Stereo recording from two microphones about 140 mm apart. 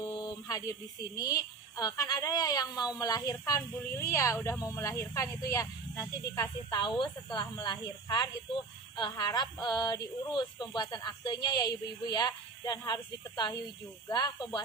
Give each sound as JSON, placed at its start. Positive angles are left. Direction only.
{"t": 0.0, "sound": "a woman's voice", "side_deg": 30}